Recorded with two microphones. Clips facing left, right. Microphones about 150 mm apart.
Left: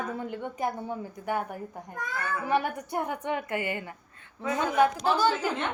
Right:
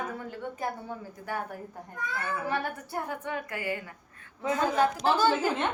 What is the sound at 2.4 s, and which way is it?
A woman's voice, 15° left (ahead or behind).